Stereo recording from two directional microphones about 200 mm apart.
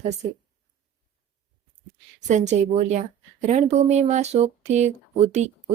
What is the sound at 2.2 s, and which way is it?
Speech, 35° right (ahead or behind).